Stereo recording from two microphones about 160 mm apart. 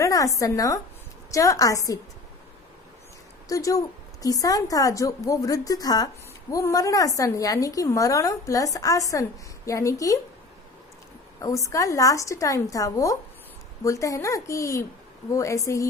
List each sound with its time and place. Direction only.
0.0 s a sound: 20° left (ahead or behind)
0.3 s a woman's voice: 20° left (ahead or behind)
3.5 s a woman's voice: 20° left (ahead or behind)
11.4 s a woman's voice: 20° left (ahead or behind)